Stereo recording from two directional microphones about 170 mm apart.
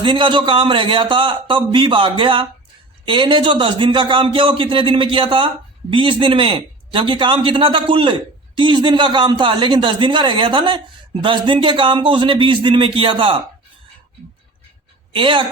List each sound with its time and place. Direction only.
0.0 s a man's voice: 30° right (ahead or behind)
15.1 s a man's voice: 30° right (ahead or behind)